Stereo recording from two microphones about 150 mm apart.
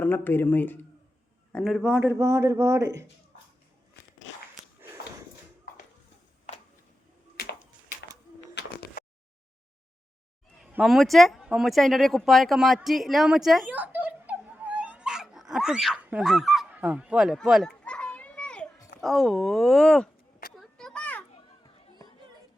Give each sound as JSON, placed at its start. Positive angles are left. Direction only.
{"t": 0.0, "sound": "speech", "side_deg": 15}
{"t": 1.5, "sound": "a man's voice", "side_deg": 0}
{"t": 10.8, "sound": "speech", "side_deg": 0}
{"t": 13.7, "sound": "dog", "side_deg": -10}
{"t": 18.9, "sound": "speech", "side_deg": 0}
{"t": 20.6, "sound": "a sound", "side_deg": 5}